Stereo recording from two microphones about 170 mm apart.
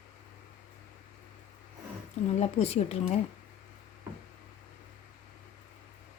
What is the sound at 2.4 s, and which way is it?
Speech, 35° left (ahead or behind).